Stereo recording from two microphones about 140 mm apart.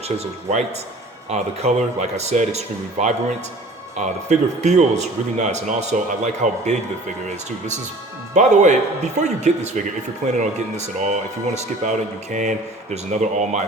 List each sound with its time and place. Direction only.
1.3 s speech: 50° right (ahead or behind)
8.3 s speech: 60° right (ahead or behind)